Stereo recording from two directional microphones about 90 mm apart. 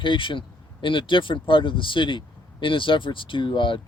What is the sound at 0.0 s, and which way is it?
Speech, 70° left (ahead or behind).